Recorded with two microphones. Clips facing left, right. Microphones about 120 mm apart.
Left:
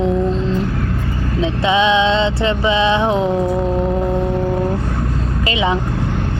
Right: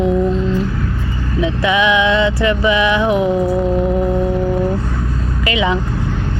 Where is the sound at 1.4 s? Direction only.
25° left (ahead or behind).